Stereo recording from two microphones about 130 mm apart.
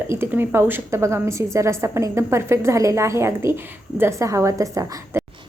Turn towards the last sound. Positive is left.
turn(degrees=-25)  # may be behind; listen again after turning